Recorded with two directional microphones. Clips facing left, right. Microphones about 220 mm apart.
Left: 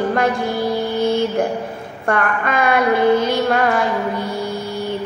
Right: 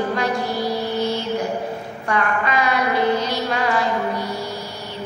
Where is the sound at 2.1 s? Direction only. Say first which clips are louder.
Left 3 dB; 55° left (ahead or behind).